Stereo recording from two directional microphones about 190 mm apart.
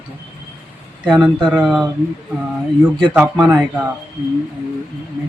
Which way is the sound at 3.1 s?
5° right (ahead or behind).